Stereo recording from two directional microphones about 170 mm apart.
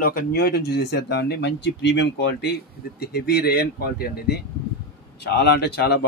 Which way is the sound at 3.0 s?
70° left (ahead or behind).